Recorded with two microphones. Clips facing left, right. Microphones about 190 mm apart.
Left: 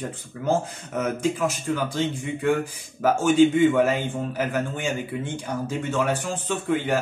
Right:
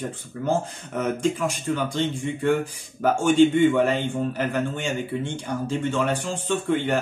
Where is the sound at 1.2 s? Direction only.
5° left (ahead or behind).